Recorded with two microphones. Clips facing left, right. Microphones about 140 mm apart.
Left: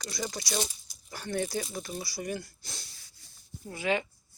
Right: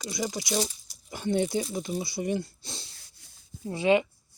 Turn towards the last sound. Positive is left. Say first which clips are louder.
# right 7 dB
turn(degrees=-30)  # may be behind; listen again after turning